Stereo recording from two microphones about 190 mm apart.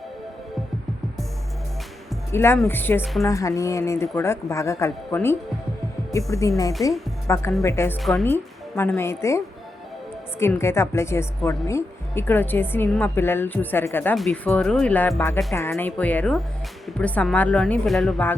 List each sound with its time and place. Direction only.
2.3 s a woman's voice: 10° left (ahead or behind)
3.0 s a woman's voice: centre (ahead or behind)
3.2 s a woman's voice: 15° left (ahead or behind)
10.4 s a woman's voice: 15° left (ahead or behind)